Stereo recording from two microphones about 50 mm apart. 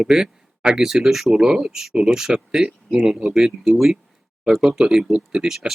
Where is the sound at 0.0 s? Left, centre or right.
Centre.